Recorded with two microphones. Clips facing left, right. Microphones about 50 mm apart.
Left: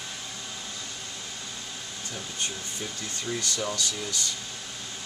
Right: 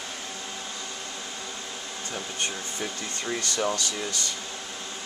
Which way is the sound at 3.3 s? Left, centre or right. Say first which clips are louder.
Right 3 dB; right.